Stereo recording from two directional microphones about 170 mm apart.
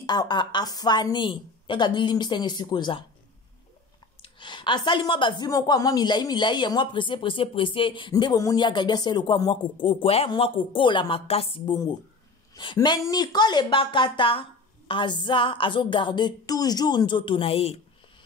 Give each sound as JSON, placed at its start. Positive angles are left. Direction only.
{"t": 0.0, "sound": "a woman's voice", "side_deg": 25}
{"t": 4.2, "sound": "a woman's voice", "side_deg": 30}